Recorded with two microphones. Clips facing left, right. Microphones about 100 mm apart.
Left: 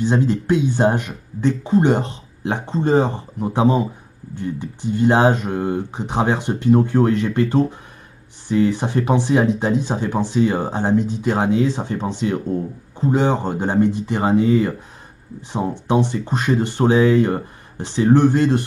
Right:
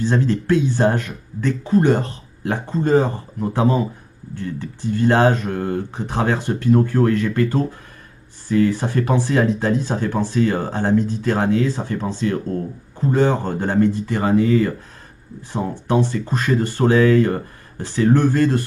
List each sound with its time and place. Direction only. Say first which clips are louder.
0.0 s speech: left 1 dB; 15° left (ahead or behind)